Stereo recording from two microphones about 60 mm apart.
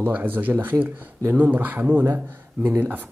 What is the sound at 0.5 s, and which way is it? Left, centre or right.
Speech, right.